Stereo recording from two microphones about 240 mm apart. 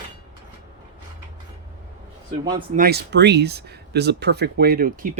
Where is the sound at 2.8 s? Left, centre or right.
Right.